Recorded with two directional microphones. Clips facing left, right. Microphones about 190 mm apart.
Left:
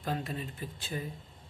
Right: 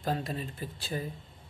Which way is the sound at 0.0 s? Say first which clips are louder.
Right 2 dB; 35° right (ahead or behind).